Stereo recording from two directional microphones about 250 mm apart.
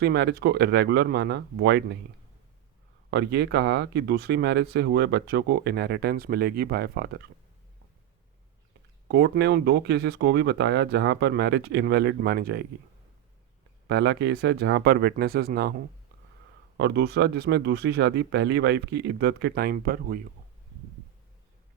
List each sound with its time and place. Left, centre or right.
0.0 s speech: right
3.1 s speech: right
9.0 s speech: right
13.8 s speech: right
16.7 s speech: right